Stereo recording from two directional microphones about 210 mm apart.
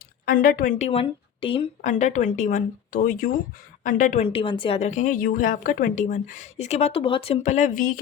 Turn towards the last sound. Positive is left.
turn(degrees=40)  # may be behind; listen again after turning